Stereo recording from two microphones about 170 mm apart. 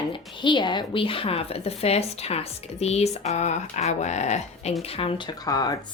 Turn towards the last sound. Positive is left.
turn(degrees=20)  # may be behind; listen again after turning